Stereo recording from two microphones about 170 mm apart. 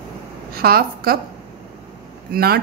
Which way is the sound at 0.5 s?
65° right (ahead or behind).